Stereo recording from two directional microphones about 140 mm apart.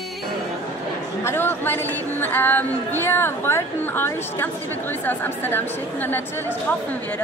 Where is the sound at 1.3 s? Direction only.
15° left (ahead or behind).